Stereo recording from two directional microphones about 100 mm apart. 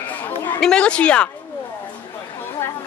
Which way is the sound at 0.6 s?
10° left (ahead or behind).